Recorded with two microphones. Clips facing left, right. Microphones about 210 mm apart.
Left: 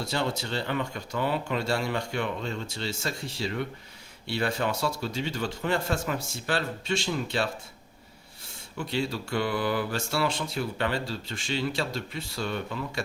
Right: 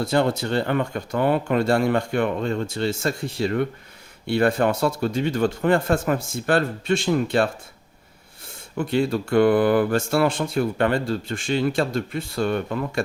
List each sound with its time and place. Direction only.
0.0 s speech: 55° right (ahead or behind)
8.8 s speech: 50° right (ahead or behind)